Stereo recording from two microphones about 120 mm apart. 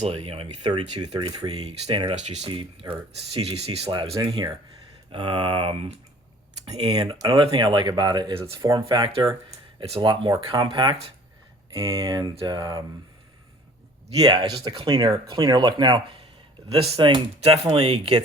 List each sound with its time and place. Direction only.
0.0 s speech: 55° right (ahead or behind); by 1.6 s 35° right (ahead or behind)
2.1 s speech: 65° right (ahead or behind)
2.5 s speech: 45° right (ahead or behind)
4.2 s speech: 35° right (ahead or behind); by 6.9 s 55° right (ahead or behind)
6.9 s speech: 35° right (ahead or behind)
8.9 s speech: 45° right (ahead or behind)
11.7 s speech: 30° right (ahead or behind)
14.2 s speech: 40° right (ahead or behind)
16.7 s speech: 55° right (ahead or behind)